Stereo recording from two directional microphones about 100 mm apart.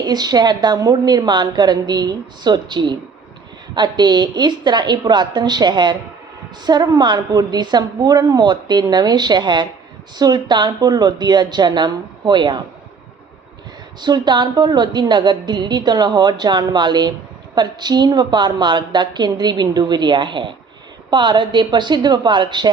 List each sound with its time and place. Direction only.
0.0 s a woman's voice: 45° right (ahead or behind)
14.0 s a woman's voice: 45° right (ahead or behind)